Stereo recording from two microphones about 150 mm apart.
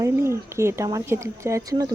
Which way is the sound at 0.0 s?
20° right (ahead or behind).